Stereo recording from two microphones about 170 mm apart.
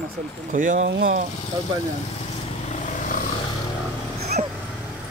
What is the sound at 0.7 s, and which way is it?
Speech, 70° right (ahead or behind).